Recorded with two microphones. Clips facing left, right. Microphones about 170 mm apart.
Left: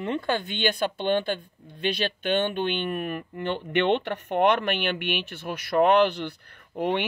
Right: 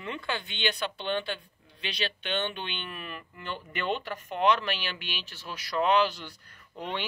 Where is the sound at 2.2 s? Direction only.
50° left (ahead or behind).